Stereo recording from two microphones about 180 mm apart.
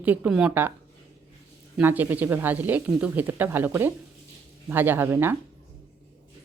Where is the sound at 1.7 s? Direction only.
10° right (ahead or behind).